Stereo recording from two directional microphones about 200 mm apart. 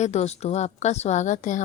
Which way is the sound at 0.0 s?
35° left (ahead or behind).